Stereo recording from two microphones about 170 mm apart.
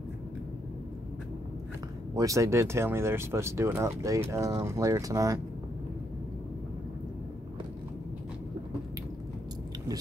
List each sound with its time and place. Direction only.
2.1 s speech: 20° right (ahead or behind)